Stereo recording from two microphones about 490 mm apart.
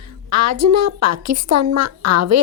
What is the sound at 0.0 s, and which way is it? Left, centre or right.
A woman's voice, right.